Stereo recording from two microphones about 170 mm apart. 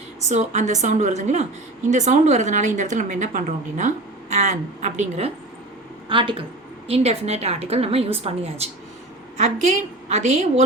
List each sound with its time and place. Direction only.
0.3 s a woman's voice: 45° right (ahead or behind)